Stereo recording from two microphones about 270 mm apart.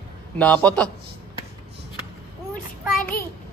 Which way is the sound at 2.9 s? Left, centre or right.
Left.